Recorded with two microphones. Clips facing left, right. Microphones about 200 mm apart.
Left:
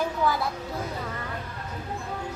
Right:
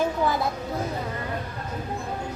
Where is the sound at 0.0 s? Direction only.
20° right (ahead or behind).